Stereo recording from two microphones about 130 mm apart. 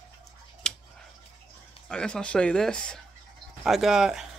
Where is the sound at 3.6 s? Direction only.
5° right (ahead or behind).